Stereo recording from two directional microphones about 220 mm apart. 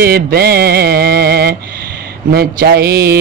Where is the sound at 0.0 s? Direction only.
45° right (ahead or behind).